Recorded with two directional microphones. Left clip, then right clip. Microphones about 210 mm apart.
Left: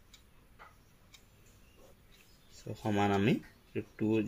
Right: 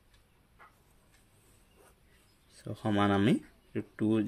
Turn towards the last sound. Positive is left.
turn(degrees=-50)  # may be behind; listen again after turning